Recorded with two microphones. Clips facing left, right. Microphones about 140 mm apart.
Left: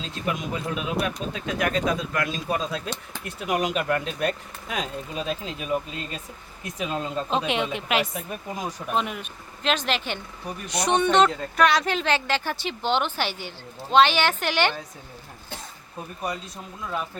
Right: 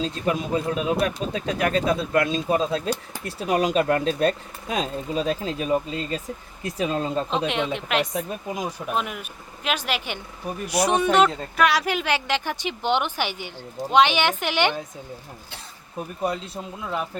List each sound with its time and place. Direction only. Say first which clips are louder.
0.0 s speech: right 5 dB; 30° right (ahead or behind)
7.3 s a woman's voice: right 1 dB; centre (ahead or behind); by 14.8 s 15° right (ahead or behind)
16.0 s speech: right 5 dB; 25° right (ahead or behind)